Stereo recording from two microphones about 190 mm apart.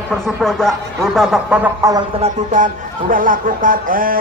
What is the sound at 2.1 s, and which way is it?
Speech, 35° right (ahead or behind).